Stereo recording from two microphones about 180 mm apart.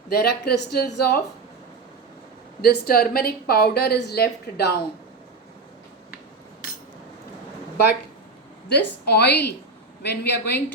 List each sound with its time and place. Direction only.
0.1 s speech: 65° left (ahead or behind)
2.6 s speech: 55° left (ahead or behind)
8.7 s a woman's voice: 65° left (ahead or behind)